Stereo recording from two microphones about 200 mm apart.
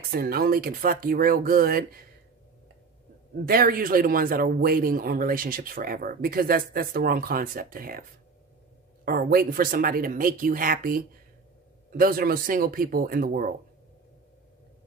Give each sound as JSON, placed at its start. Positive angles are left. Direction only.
{"t": 0.1, "sound": "speech", "side_deg": -50}
{"t": 3.4, "sound": "speech", "side_deg": -45}
{"t": 9.0, "sound": "speech", "side_deg": -50}